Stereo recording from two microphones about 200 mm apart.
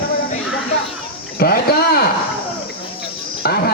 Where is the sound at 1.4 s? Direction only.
50° left (ahead or behind).